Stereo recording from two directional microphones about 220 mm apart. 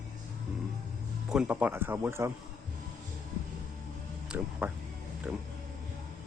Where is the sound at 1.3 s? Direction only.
5° right (ahead or behind).